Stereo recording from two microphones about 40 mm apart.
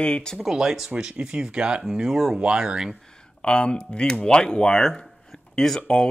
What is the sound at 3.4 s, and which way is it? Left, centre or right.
Speech, left.